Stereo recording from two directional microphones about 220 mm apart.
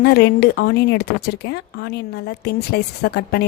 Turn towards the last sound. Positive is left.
turn(degrees=45)  # may be behind; listen again after turning